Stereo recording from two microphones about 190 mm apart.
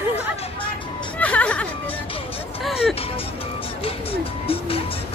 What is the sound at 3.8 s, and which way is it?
Music, 30° left (ahead or behind).